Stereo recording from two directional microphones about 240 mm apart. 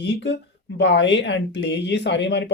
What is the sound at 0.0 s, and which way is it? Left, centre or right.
Speech, left.